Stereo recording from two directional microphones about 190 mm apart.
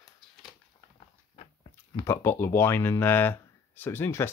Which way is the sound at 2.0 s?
15° left (ahead or behind).